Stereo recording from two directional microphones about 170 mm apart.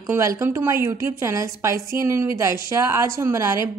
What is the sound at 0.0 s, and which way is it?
A woman's voice, 20° right (ahead or behind).